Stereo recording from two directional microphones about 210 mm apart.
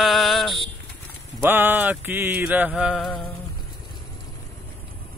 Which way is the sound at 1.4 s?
10° right (ahead or behind).